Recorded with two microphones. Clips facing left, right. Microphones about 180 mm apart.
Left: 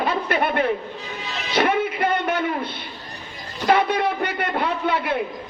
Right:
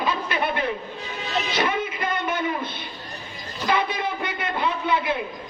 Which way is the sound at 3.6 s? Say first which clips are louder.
Left 5 dB; 65° left (ahead or behind).